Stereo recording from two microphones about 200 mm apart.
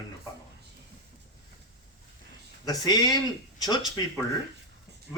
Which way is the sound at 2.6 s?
20° left (ahead or behind).